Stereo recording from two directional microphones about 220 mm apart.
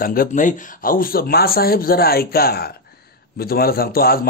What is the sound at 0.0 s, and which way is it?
A man's voice, 40° left (ahead or behind).